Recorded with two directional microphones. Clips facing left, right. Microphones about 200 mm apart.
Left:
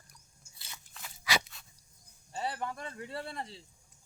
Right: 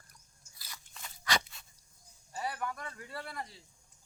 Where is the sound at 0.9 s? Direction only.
5° left (ahead or behind).